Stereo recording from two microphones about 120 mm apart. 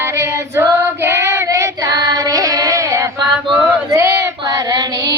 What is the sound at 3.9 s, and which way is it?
Child singing, 25° right (ahead or behind).